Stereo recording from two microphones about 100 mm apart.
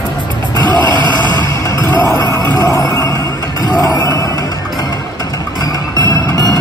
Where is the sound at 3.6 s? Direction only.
35° left (ahead or behind).